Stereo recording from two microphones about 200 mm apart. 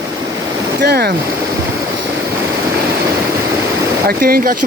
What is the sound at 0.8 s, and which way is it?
Speech, 55° right (ahead or behind).